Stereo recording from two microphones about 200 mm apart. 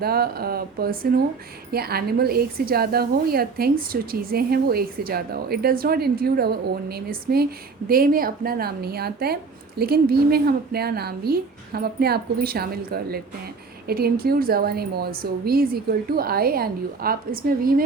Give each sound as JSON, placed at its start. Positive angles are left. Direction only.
{"t": 0.0, "sound": "a woman's voice", "side_deg": -50}